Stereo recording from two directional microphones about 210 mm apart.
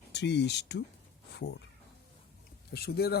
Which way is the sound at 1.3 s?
55° left (ahead or behind).